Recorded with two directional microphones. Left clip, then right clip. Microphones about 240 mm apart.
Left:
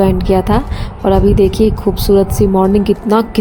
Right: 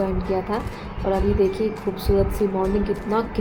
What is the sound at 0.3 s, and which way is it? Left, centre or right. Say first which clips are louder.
Speech: left 11 dB; left.